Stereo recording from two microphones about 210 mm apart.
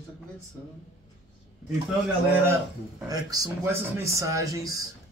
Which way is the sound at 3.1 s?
15° right (ahead or behind).